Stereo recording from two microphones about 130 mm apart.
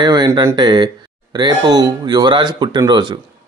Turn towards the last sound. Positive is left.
turn(degrees=-35)  # may be behind; listen again after turning